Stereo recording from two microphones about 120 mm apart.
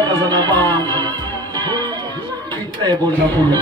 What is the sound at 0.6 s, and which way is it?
Music, 20° left (ahead or behind).